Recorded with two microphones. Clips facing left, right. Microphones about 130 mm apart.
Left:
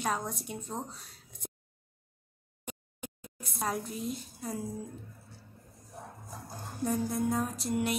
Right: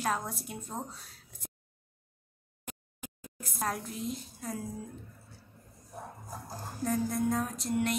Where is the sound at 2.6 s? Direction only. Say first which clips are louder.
Left 3 dB; centre (ahead or behind).